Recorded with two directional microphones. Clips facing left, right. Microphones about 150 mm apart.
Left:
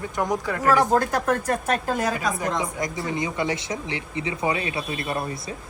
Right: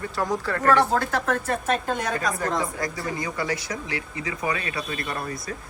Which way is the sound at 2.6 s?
20° left (ahead or behind).